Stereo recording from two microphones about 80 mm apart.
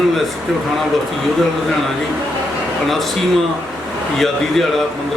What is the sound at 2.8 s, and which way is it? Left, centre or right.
Speech, centre.